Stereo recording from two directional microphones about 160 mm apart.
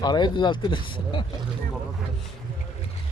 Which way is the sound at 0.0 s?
25° left (ahead or behind).